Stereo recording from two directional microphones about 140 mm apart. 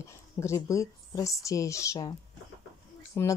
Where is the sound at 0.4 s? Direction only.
20° left (ahead or behind).